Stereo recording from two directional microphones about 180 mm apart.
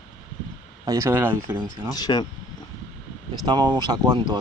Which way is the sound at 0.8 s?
20° right (ahead or behind).